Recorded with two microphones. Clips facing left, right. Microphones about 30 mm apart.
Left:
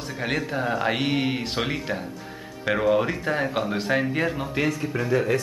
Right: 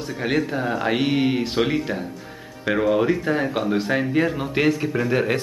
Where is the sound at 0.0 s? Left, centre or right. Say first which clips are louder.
Right 4 dB; centre.